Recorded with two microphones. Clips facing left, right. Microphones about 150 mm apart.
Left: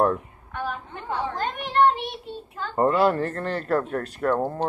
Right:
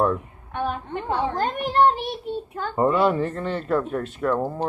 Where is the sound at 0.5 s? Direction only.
25° right (ahead or behind).